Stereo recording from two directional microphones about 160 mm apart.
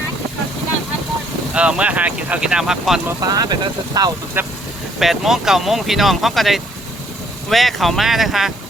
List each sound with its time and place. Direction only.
1.5 s speech: 5° right (ahead or behind)
3.1 s speech: 20° right (ahead or behind)
4.4 s speech: 15° right (ahead or behind)
4.9 s speech: centre (ahead or behind)